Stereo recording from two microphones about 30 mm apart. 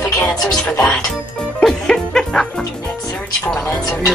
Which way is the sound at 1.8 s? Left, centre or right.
Centre.